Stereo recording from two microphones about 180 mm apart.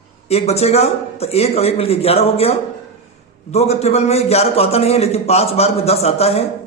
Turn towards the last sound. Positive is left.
turn(degrees=35)  # may be behind; listen again after turning